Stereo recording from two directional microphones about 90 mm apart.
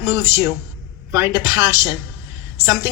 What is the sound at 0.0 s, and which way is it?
Speech, 30° right (ahead or behind).